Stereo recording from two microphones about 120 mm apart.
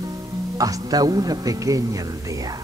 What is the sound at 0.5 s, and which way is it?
A man's voice, 30° right (ahead or behind).